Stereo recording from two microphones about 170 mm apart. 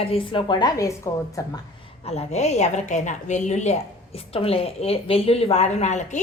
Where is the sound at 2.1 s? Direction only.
40° left (ahead or behind).